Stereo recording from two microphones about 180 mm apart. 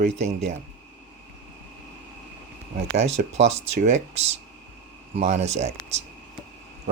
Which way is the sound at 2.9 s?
40° right (ahead or behind).